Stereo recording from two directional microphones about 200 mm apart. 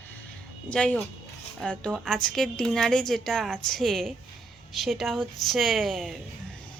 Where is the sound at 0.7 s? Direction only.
5° left (ahead or behind).